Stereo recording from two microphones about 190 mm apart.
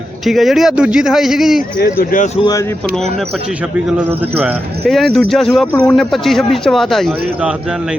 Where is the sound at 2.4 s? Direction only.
20° left (ahead or behind).